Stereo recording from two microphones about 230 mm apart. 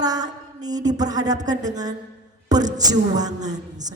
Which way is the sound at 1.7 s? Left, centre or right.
Centre.